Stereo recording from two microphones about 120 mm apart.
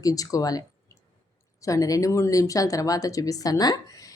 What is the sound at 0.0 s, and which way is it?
Speech, 30° left (ahead or behind).